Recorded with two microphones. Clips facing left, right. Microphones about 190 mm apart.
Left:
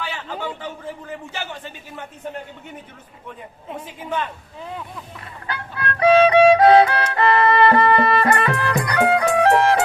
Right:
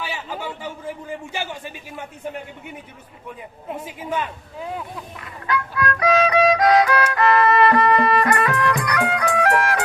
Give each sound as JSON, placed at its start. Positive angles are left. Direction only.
{"t": 0.0, "sound": "speech", "side_deg": -10}
{"t": 3.7, "sound": "a woman's voice", "side_deg": -10}
{"t": 5.2, "sound": "music", "side_deg": 30}